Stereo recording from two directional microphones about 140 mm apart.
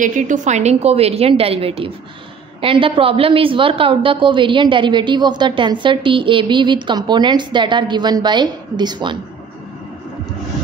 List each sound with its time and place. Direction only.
0.0 s a woman's voice: 65° right (ahead or behind); by 9.2 s 35° right (ahead or behind)